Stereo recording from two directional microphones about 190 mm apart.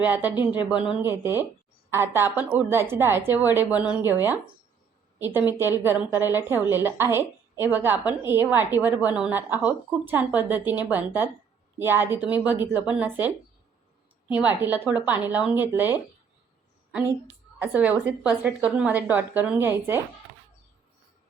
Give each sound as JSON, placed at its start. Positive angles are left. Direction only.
{"t": 0.0, "sound": "a woman's voice", "side_deg": -10}
{"t": 0.3, "sound": "speech", "side_deg": 25}
{"t": 0.8, "sound": "a woman's voice", "side_deg": -10}
{"t": 17.6, "sound": "a woman's voice", "side_deg": -10}